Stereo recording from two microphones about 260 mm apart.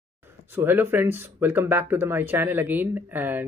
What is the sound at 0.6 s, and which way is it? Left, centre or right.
Speech, centre.